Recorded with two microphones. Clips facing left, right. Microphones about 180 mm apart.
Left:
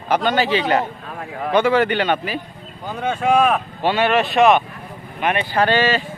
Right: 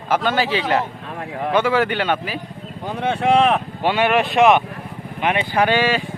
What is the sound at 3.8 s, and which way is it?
A man's voice, 15° right (ahead or behind).